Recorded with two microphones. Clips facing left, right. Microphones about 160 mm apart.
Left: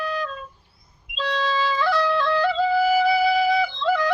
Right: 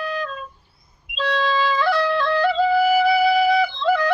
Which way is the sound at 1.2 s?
60° right (ahead or behind).